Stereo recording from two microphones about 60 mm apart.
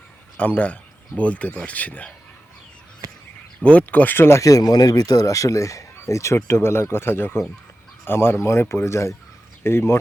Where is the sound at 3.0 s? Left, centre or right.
Right.